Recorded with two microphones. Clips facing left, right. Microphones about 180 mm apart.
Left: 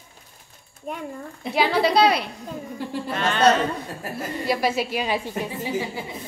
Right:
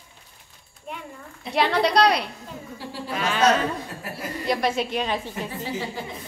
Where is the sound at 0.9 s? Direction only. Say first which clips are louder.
Left 4 dB; 45° left (ahead or behind).